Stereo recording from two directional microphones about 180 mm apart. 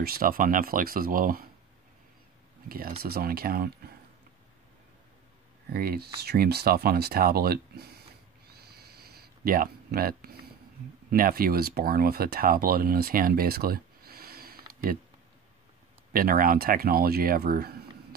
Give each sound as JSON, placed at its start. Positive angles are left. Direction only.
{"t": 0.0, "sound": "speech", "side_deg": -55}
{"t": 3.0, "sound": "speech", "side_deg": -55}
{"t": 5.7, "sound": "speech", "side_deg": -55}
{"t": 8.5, "sound": "a sound", "side_deg": -60}
{"t": 11.1, "sound": "speech", "side_deg": -55}
{"t": 16.1, "sound": "speech", "side_deg": -55}